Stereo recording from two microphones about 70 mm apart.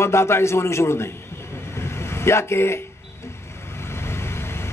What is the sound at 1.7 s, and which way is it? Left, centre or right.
Vehicle, left.